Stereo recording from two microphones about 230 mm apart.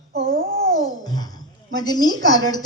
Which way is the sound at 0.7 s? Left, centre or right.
Centre.